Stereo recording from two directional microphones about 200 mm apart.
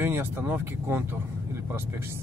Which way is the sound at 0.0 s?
10° right (ahead or behind).